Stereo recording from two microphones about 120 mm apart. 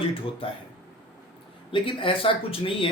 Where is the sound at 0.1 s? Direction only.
50° left (ahead or behind).